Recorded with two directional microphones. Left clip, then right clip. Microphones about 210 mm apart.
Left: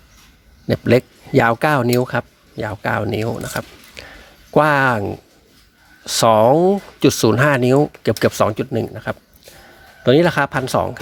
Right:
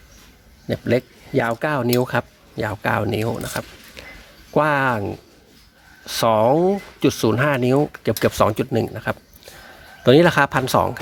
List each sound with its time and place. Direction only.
0.7 s speech: 25° left (ahead or behind)
1.9 s speech: 10° left (ahead or behind)